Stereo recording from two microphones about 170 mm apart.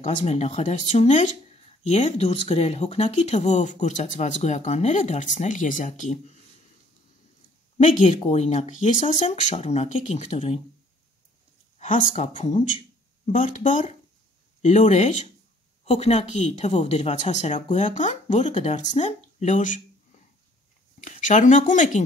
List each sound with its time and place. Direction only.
0.0 s speech: 40° left (ahead or behind)
7.7 s speech: 45° left (ahead or behind)
11.8 s speech: 45° left (ahead or behind)
21.0 s speech: 45° left (ahead or behind)